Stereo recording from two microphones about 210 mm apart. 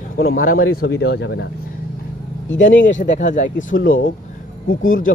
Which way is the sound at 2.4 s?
65° left (ahead or behind).